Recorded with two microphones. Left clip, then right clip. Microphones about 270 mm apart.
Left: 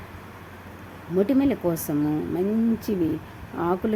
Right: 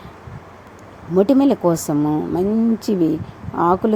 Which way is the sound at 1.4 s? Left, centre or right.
Centre.